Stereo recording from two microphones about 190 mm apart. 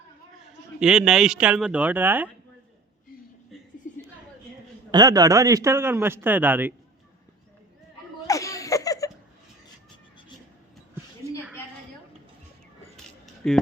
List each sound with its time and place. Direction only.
0.4 s speech: 5° right (ahead or behind)
4.9 s a man's voice: 20° right (ahead or behind)
8.3 s a sound: 15° left (ahead or behind)
13.4 s speech: 5° left (ahead or behind)